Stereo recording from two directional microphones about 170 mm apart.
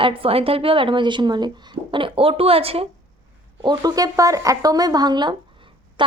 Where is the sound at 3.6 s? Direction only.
20° right (ahead or behind).